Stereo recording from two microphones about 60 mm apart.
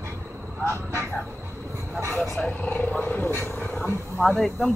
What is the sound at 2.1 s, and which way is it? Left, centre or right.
Speech, centre.